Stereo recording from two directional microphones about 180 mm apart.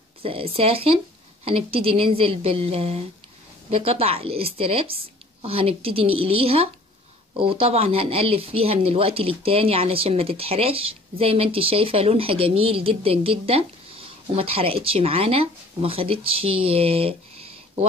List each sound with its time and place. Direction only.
0.2 s speech: 30° right (ahead or behind)